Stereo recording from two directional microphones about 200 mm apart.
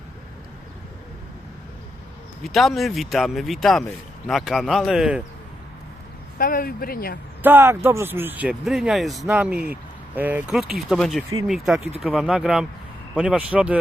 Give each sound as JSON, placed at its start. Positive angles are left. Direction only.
{"t": 2.4, "sound": "speech", "side_deg": 0}
{"t": 6.4, "sound": "speech", "side_deg": 45}
{"t": 7.4, "sound": "speech", "side_deg": -10}